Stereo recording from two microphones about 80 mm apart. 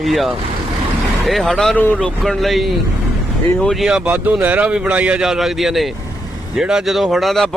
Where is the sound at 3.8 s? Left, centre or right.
Centre.